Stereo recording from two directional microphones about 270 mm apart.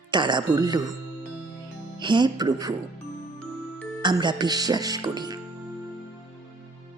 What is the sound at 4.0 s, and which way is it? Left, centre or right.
Speech, centre.